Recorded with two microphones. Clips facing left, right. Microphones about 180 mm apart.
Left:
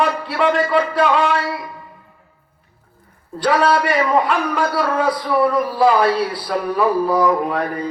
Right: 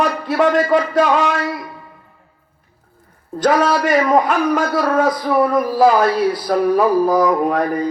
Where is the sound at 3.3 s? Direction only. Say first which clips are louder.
Right 1 dB; 45° right (ahead or behind).